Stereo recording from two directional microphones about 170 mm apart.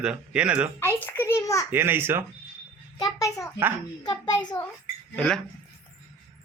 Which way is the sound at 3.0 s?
20° left (ahead or behind).